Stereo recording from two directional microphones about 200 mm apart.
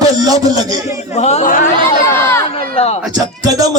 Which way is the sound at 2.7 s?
30° left (ahead or behind).